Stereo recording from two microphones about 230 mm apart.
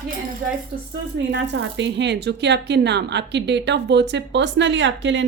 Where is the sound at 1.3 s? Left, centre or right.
Right.